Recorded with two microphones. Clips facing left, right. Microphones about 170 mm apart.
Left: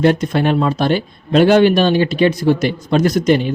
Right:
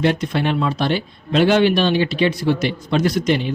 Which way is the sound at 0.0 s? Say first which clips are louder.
Left 5 dB; 45° left (ahead or behind).